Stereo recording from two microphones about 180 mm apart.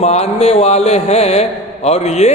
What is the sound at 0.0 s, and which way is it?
A man's voice, 35° left (ahead or behind).